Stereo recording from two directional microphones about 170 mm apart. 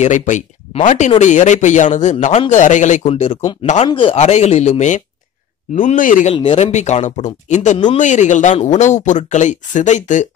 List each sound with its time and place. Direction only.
0.0 s speech: 45° left (ahead or behind)
3.1 s speech: 30° left (ahead or behind)
3.6 s speech: 40° left (ahead or behind)
6.3 s speech: 30° left (ahead or behind)